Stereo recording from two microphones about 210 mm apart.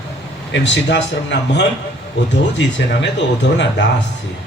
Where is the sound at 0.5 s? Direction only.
55° left (ahead or behind).